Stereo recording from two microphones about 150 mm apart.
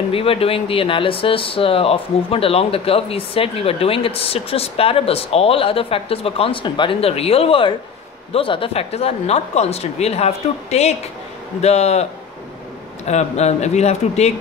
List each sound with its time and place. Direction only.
0.1 s speech: 40° left (ahead or behind)